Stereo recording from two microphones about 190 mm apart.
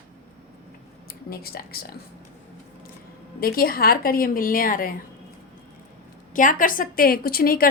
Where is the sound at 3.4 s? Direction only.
50° left (ahead or behind).